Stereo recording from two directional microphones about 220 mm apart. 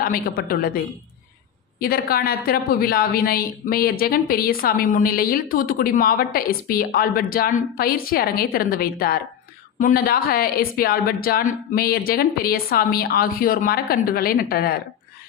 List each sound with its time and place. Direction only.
0.0 s a woman's voice: 40° left (ahead or behind)
1.8 s a woman's voice: 45° left (ahead or behind)